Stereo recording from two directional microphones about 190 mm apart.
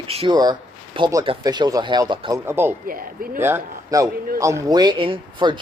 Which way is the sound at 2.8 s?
50° right (ahead or behind).